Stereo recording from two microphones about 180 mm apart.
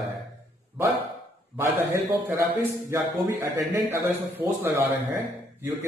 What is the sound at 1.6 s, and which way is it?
A man's voice, 15° right (ahead or behind).